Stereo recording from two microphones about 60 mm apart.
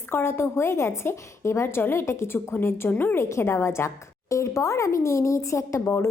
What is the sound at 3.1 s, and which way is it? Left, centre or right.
A woman's voice, left.